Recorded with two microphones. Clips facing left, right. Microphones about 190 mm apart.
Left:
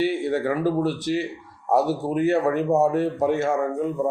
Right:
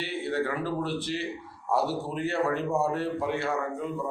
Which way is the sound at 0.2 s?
45° left (ahead or behind).